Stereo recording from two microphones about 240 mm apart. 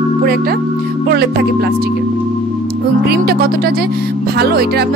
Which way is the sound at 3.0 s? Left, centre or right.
Right.